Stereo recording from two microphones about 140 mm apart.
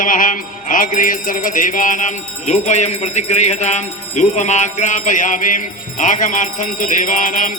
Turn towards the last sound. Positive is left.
turn(degrees=70)  # may be behind; listen again after turning